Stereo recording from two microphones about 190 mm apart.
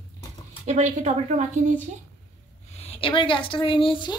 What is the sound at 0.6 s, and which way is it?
Speech, 35° right (ahead or behind).